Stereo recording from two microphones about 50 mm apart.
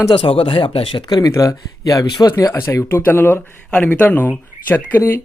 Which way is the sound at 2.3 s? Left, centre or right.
Left.